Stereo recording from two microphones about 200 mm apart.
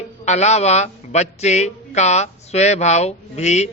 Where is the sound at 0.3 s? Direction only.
35° left (ahead or behind).